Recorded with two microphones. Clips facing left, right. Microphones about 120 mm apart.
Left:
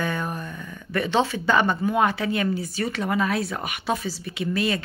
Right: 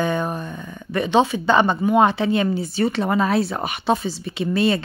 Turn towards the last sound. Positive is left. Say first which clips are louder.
# right 5 dB
turn(degrees=-30)  # may be behind; listen again after turning